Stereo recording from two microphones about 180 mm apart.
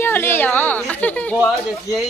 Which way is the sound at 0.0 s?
10° left (ahead or behind).